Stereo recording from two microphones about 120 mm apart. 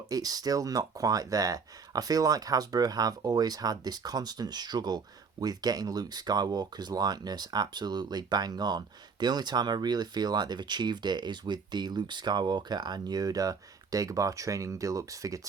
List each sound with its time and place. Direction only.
0.1 s speech: 30° right (ahead or behind)